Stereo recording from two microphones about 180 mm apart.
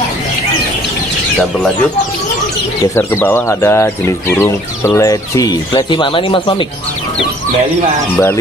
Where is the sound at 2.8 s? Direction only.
15° left (ahead or behind); by 6.6 s 30° left (ahead or behind).